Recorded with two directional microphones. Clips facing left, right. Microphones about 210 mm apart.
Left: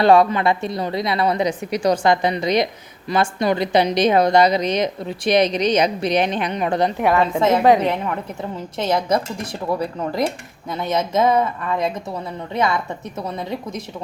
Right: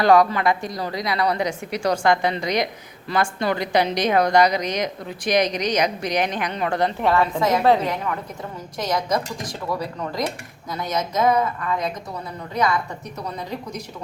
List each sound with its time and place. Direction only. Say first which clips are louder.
0.0 s a woman's voice: left 2 dB; 25° left (ahead or behind)
8.8 s a woman's voice: left 4 dB; 25° left (ahead or behind)